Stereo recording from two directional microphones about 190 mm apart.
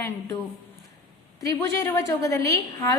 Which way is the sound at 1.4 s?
15° left (ahead or behind).